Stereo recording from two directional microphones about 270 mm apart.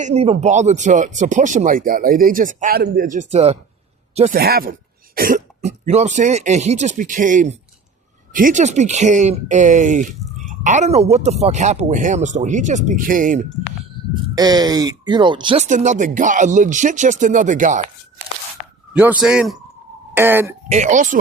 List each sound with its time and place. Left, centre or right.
0.0 s speech: right
14.3 s speech: centre
19.2 s speech: centre
20.7 s speech: right